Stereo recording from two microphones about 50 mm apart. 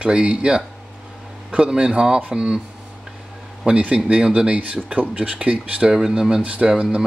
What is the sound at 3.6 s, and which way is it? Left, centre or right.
Speech, right.